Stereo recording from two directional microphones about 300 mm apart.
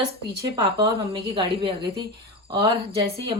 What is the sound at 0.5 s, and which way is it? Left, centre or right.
Speech, centre.